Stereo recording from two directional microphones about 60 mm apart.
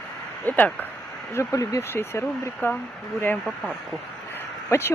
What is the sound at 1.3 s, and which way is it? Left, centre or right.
Speech, left.